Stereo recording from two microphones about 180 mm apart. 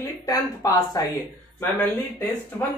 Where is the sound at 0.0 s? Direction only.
20° left (ahead or behind).